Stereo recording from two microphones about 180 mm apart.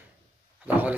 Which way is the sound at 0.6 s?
10° right (ahead or behind).